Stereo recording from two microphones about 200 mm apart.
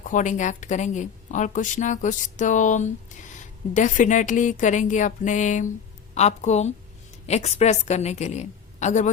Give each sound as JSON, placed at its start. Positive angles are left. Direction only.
{"t": 0.1, "sound": "a woman's voice", "side_deg": 40}